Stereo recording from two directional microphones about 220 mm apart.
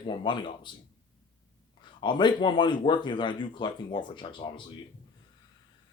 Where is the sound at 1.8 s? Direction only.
20° left (ahead or behind).